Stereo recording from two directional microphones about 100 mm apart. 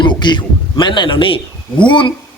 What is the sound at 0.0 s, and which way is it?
Speech, 50° left (ahead or behind).